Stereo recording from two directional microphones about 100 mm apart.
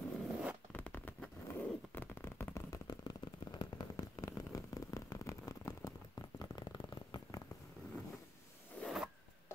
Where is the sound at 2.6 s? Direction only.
45° left (ahead or behind).